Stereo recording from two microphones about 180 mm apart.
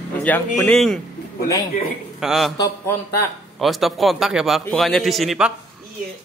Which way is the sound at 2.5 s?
15° left (ahead or behind).